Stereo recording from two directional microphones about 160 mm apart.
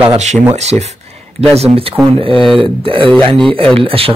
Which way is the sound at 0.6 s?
45° right (ahead or behind).